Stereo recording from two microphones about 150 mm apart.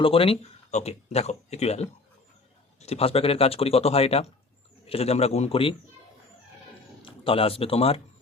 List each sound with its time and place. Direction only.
0.0 s speech: 40° left (ahead or behind)
7.0 s speech: 40° left (ahead or behind)